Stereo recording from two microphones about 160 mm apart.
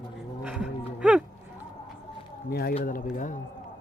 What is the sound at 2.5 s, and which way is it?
Speech, 75° left (ahead or behind).